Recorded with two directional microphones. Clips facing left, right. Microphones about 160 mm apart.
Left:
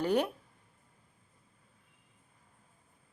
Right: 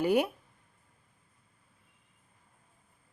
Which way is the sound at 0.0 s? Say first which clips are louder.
Right 3 dB; 10° right (ahead or behind).